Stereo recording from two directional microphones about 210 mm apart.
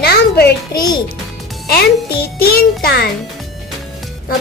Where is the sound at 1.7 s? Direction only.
50° left (ahead or behind).